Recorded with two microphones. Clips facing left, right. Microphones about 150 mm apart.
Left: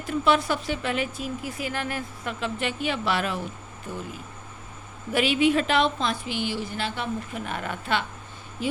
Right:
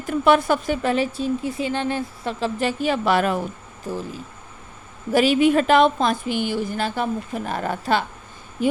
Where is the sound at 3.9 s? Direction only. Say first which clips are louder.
Right 6 dB; 35° right (ahead or behind).